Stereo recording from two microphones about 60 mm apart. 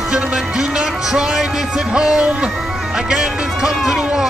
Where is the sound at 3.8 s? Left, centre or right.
Centre.